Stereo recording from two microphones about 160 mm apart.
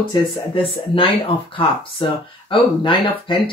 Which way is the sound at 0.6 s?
35° left (ahead or behind).